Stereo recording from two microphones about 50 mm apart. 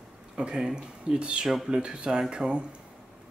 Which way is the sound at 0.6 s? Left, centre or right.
Centre.